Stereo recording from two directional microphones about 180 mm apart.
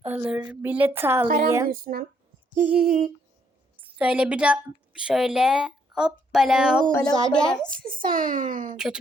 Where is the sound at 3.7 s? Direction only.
10° right (ahead or behind).